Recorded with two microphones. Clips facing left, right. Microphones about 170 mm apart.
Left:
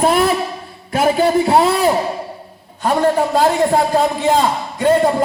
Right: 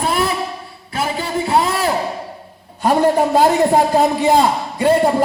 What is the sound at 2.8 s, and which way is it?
A man's voice, 15° right (ahead or behind).